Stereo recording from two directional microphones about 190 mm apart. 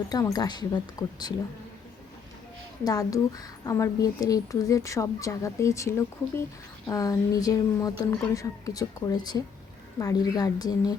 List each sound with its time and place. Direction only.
0.1 s speech: 20° left (ahead or behind)
2.8 s a woman's voice: 20° left (ahead or behind)